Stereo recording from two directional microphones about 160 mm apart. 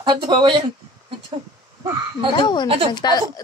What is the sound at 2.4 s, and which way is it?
Speech, 30° left (ahead or behind).